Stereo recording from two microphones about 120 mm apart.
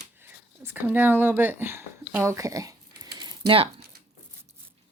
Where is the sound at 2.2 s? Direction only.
25° right (ahead or behind); by 3.8 s 50° right (ahead or behind).